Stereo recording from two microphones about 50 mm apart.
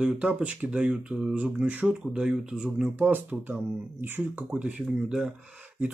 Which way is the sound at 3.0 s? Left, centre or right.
Right.